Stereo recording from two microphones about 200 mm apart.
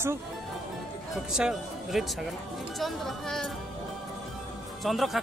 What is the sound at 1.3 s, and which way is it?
Speech, centre (ahead or behind).